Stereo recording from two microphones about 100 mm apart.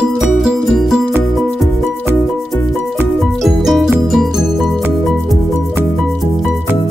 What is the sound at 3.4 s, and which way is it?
Music, centre (ahead or behind).